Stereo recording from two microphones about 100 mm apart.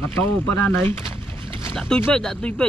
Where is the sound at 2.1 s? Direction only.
10° left (ahead or behind).